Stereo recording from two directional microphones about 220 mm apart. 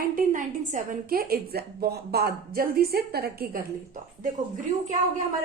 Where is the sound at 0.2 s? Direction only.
35° right (ahead or behind).